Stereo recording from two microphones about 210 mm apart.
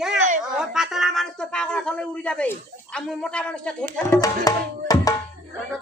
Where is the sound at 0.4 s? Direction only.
Centre (ahead or behind).